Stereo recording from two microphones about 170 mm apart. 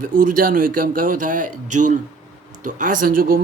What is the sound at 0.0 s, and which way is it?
A man's voice, 55° right (ahead or behind).